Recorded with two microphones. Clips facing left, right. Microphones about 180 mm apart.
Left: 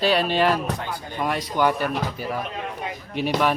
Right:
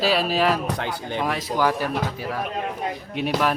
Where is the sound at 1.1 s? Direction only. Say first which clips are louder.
Left 1 dB; centre (ahead or behind).